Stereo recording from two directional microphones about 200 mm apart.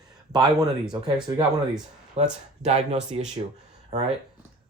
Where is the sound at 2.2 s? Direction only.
35° right (ahead or behind).